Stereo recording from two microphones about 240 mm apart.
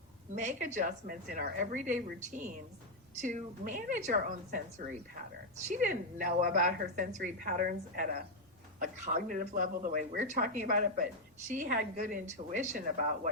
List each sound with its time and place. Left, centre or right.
0.3 s speech: right
9.3 s speech: right